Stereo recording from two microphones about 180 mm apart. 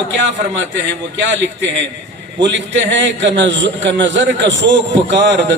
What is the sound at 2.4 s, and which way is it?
A man's voice, 80° right.